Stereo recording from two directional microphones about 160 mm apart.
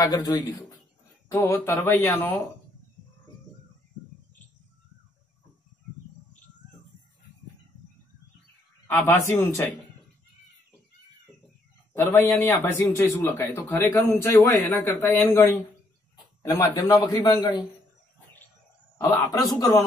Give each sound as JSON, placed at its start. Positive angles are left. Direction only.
{"t": 0.0, "sound": "a man's voice", "side_deg": 25}
{"t": 8.8, "sound": "a man's voice", "side_deg": 10}
{"t": 11.9, "sound": "a man's voice", "side_deg": 15}
{"t": 18.9, "sound": "a man's voice", "side_deg": 20}